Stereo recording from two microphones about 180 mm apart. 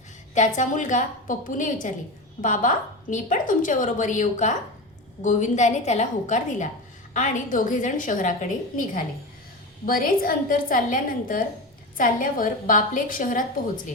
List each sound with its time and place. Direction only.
0.3 s a woman's voice: 45° left (ahead or behind)